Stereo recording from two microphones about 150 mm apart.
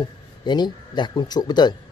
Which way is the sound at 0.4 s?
30° left (ahead or behind).